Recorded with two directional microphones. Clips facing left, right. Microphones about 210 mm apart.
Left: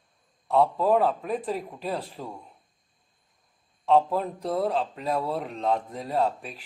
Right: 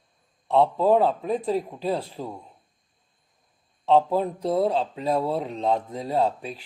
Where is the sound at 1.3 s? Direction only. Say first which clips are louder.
Right 5 dB; 25° right (ahead or behind).